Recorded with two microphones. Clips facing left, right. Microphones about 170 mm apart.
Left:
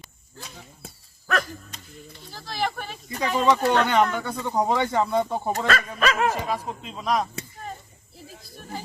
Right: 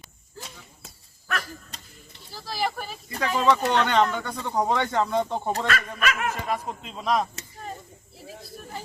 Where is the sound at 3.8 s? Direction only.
10° left (ahead or behind).